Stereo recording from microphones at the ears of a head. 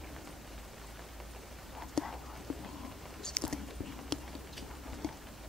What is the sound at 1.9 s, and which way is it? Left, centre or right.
Whispering, left.